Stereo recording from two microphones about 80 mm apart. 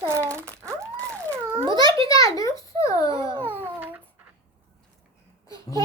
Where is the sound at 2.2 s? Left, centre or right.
Left.